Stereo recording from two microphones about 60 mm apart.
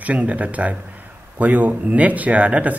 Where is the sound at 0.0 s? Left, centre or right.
Right.